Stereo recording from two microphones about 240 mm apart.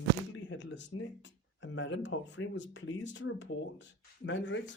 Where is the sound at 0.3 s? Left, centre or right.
Left.